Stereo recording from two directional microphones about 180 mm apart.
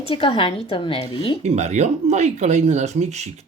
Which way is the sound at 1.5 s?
40° right (ahead or behind).